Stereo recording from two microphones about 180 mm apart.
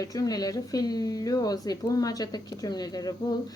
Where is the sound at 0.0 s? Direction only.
20° left (ahead or behind).